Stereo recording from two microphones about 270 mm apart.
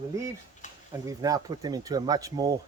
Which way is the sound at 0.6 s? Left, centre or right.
Left.